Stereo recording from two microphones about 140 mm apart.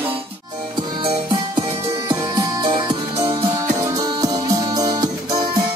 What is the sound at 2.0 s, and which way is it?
Music, 25° right (ahead or behind).